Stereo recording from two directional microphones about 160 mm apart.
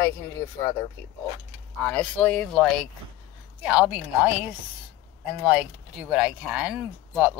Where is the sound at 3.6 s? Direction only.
10° right (ahead or behind).